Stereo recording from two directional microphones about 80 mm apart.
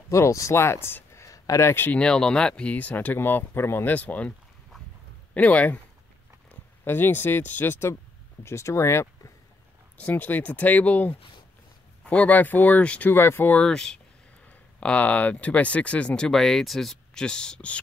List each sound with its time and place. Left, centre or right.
0.1 s speech: left
1.2 s a sound: left
1.7 s speech: left
2.0 s speech: centre
5.3 s speech: centre; by 9.1 s left
9.9 s speech: centre
13.1 s speech: left
13.6 s speech: centre